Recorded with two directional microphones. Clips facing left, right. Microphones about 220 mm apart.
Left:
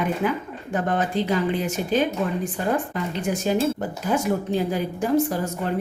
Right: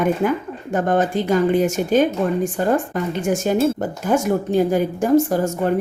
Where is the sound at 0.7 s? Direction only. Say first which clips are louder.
Right 5 dB; 45° right (ahead or behind).